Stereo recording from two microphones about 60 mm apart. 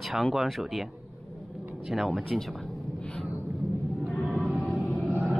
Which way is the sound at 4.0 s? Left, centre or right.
Centre.